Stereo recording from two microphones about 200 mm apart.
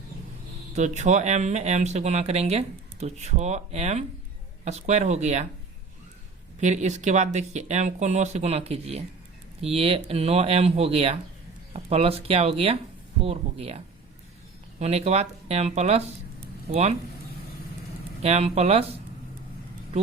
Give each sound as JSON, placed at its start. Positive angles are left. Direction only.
{"t": 0.8, "sound": "speech", "side_deg": -35}
{"t": 6.6, "sound": "speech", "side_deg": -35}
{"t": 14.8, "sound": "speech", "side_deg": -30}
{"t": 18.2, "sound": "speech", "side_deg": -30}